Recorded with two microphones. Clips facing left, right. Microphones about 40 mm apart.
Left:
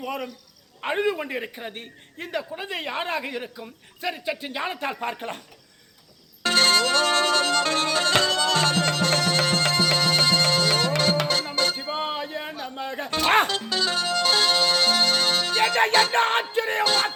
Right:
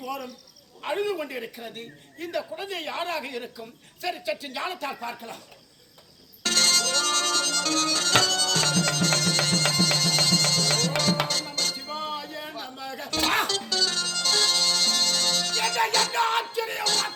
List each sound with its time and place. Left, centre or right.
0.0 s a woman's voice: left
2.3 s a woman's voice: left
5.0 s speech: left
6.4 s music: left
12.6 s a sound: left
13.7 s music: left
15.9 s a woman's voice: left
16.1 s music: left
16.8 s a woman's voice: left